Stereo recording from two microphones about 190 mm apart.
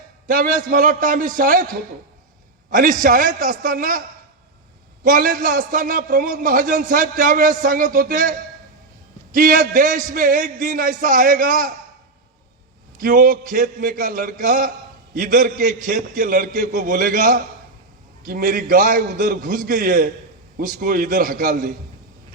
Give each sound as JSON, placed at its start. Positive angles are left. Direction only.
{"t": 0.3, "sound": "a man's voice", "side_deg": -45}
{"t": 5.0, "sound": "a man's voice", "side_deg": -45}
{"t": 13.0, "sound": "a man's voice", "side_deg": -45}